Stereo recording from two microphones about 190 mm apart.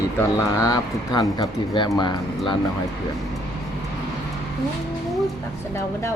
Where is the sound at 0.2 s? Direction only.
15° left (ahead or behind).